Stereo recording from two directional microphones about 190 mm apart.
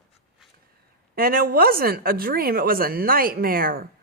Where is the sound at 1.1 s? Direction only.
50° right (ahead or behind).